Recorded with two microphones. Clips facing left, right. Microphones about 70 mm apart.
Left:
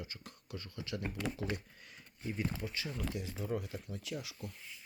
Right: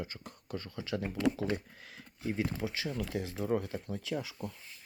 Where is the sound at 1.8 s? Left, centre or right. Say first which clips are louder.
Right 5 dB; right.